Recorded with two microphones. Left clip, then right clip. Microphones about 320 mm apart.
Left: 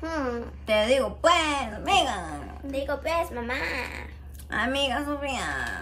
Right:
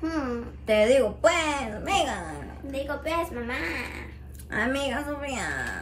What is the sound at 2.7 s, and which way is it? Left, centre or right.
A woman's voice, left.